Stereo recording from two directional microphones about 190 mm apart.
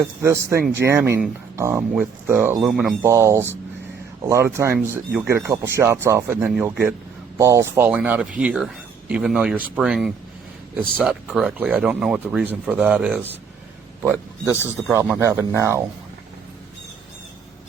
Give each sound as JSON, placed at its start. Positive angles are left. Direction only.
{"t": 0.2, "sound": "speech", "side_deg": -15}
{"t": 3.0, "sound": "speech", "side_deg": -15}
{"t": 6.4, "sound": "speech", "side_deg": 0}
{"t": 7.3, "sound": "a man's voice", "side_deg": -15}